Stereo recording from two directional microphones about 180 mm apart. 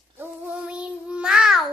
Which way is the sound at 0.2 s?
5° right (ahead or behind).